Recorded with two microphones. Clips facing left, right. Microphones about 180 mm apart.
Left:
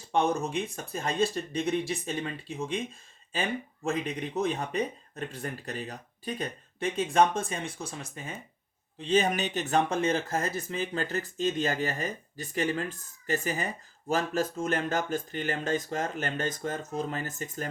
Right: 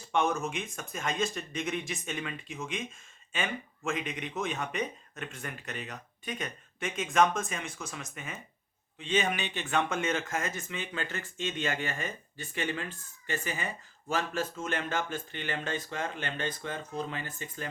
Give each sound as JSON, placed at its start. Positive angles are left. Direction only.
{"t": 0.1, "sound": "speech", "side_deg": 35}